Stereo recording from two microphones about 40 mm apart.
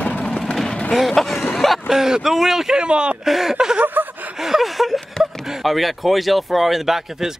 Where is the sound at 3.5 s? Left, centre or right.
Centre.